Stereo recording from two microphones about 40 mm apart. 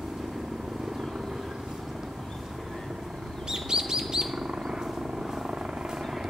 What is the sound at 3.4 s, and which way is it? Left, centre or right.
Chirp, centre.